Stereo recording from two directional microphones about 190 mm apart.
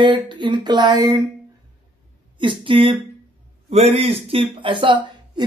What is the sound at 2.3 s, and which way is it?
A man's voice, 25° right (ahead or behind).